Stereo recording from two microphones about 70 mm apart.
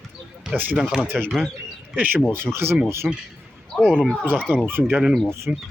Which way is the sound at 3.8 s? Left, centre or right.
Centre.